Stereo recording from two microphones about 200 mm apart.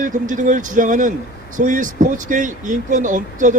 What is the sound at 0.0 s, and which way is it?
Speech, 40° right (ahead or behind).